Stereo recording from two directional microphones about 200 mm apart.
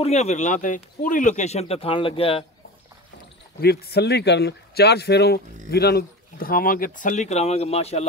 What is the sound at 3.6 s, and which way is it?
Speech, 50° left (ahead or behind).